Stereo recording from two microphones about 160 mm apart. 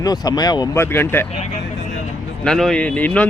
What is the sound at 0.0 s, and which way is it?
Speech, 25° left (ahead or behind).